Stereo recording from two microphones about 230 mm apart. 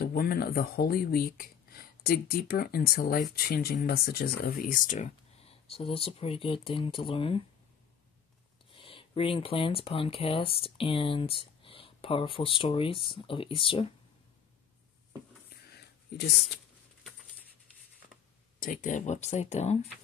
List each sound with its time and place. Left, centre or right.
0.0 s speech: left
8.7 s speech: left
16.1 s speech: left
18.6 s speech: left